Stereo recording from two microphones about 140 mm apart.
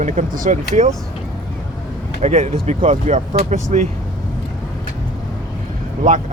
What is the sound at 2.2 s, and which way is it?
Speech, 55° right (ahead or behind).